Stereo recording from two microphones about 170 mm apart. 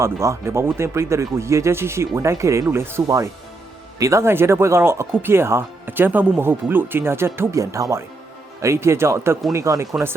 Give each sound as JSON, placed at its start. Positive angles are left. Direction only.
{"t": 0.0, "sound": "speech", "side_deg": -15}